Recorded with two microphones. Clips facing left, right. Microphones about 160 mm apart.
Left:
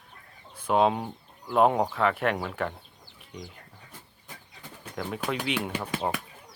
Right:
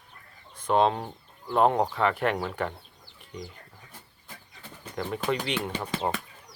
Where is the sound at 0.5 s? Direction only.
5° left (ahead or behind).